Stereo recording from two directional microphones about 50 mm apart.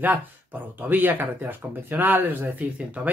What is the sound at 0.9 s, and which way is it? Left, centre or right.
Speech, right.